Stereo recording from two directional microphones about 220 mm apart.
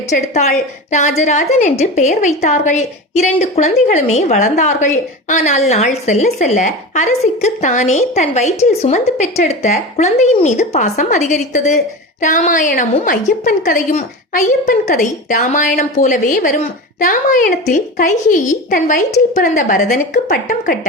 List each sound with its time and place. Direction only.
0.1 s a woman's voice: 35° left (ahead or behind)